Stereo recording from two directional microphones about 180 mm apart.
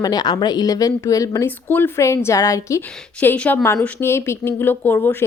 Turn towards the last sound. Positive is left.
turn(degrees=10)  # may be behind; listen again after turning